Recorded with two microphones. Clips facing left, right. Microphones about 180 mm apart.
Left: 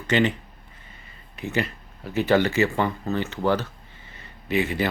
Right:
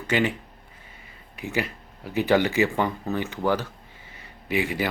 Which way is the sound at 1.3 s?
10° right (ahead or behind).